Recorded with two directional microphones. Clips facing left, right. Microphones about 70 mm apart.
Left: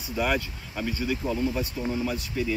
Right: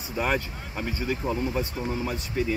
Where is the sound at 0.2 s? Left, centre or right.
Right.